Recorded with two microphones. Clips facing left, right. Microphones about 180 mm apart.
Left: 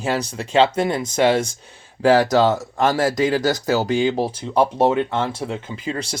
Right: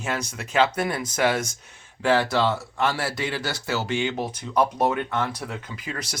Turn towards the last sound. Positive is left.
turn(degrees=30)  # may be behind; listen again after turning